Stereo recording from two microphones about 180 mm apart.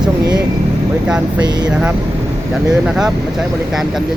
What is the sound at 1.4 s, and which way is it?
Speech, 25° right (ahead or behind).